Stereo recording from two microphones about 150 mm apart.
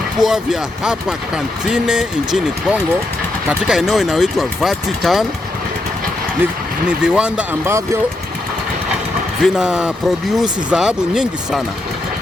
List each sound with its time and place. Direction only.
0.2 s speech: centre (ahead or behind)
6.4 s speech: 5° right (ahead or behind)
7.6 s speech: 20° right (ahead or behind)
9.4 s speech: 5° right (ahead or behind)